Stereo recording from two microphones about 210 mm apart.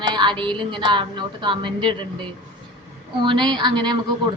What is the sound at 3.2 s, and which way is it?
Speech, 20° right (ahead or behind).